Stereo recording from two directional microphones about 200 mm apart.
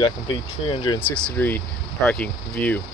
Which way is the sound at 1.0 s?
5° left (ahead or behind).